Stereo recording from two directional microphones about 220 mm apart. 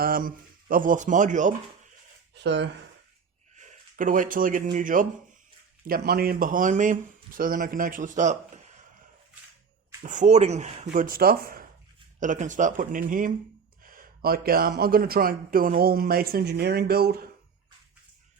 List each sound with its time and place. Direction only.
0.0 s speech: 40° right (ahead or behind)
2.3 s speech: 50° right (ahead or behind)
3.5 s speech: 35° right (ahead or behind)
10.0 s speech: 35° right (ahead or behind)